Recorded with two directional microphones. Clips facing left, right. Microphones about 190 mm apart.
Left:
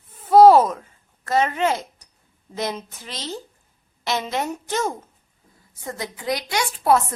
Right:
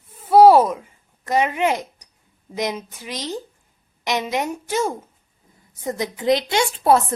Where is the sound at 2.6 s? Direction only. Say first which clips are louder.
Right 2 dB; 15° right (ahead or behind).